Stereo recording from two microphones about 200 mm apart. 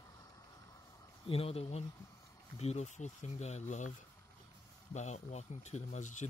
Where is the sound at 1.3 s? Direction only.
30° left (ahead or behind).